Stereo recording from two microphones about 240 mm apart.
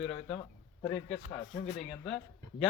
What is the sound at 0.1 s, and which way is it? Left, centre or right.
Speech, left.